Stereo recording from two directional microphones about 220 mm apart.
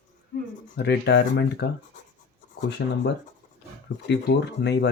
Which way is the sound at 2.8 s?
50° left (ahead or behind).